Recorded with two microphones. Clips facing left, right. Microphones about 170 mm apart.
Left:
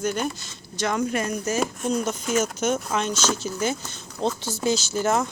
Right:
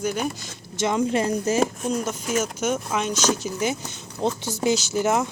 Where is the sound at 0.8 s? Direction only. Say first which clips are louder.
Right 3 dB; 25° right (ahead or behind).